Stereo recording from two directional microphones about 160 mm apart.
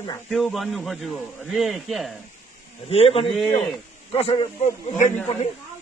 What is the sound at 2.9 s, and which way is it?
A man's voice, 35° left (ahead or behind).